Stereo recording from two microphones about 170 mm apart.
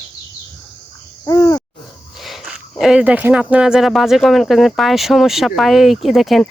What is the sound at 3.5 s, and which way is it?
Speech, 5° right (ahead or behind).